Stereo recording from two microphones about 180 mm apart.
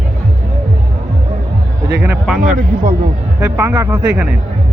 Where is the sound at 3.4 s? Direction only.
15° right (ahead or behind).